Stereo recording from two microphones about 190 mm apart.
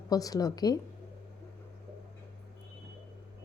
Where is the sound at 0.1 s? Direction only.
20° left (ahead or behind).